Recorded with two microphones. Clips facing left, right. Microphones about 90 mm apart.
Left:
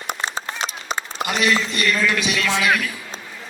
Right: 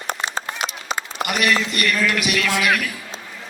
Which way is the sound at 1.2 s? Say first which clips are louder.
Even; 25° left (ahead or behind).